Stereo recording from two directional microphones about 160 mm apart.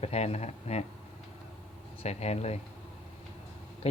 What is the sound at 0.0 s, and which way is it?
Speech, 40° left (ahead or behind).